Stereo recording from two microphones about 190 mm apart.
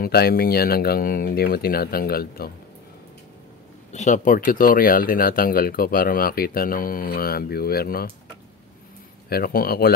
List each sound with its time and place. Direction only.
0.0 s speech: 55° left (ahead or behind)
3.9 s speech: 40° left (ahead or behind)
9.3 s speech: 50° left (ahead or behind)